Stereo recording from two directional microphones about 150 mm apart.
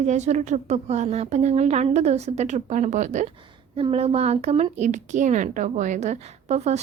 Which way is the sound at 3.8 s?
40° right (ahead or behind).